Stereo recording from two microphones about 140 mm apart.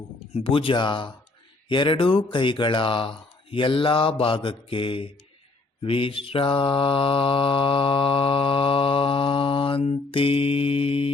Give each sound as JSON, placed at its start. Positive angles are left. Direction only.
{"t": 0.3, "sound": "mantra", "side_deg": 40}